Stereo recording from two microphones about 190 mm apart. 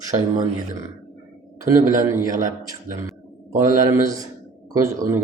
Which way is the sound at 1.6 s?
15° right (ahead or behind).